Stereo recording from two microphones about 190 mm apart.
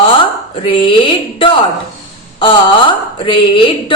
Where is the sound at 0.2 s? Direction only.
25° left (ahead or behind).